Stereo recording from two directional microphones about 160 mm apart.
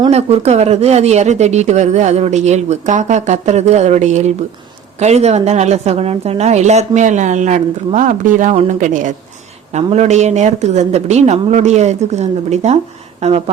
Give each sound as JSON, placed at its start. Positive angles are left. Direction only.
{"t": 0.1, "sound": "speech", "side_deg": -45}